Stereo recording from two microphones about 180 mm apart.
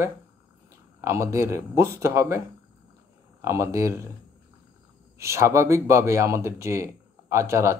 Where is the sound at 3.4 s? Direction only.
15° right (ahead or behind).